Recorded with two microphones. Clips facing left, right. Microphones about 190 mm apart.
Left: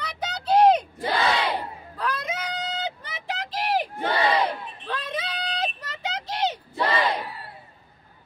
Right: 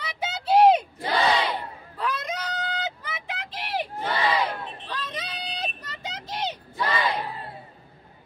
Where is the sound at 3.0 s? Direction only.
40° left (ahead or behind).